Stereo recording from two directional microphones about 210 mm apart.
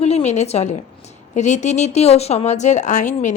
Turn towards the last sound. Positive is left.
turn(degrees=35)  # may be behind; listen again after turning